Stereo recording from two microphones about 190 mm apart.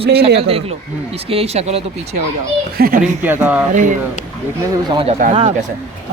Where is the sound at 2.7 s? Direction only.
50° right (ahead or behind).